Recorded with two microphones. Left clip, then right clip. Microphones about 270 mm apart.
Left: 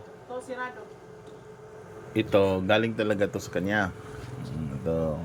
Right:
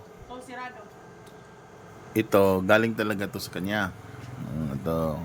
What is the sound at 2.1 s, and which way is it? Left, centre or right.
Speech, centre.